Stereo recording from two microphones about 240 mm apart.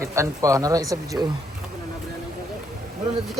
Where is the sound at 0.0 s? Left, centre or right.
Centre.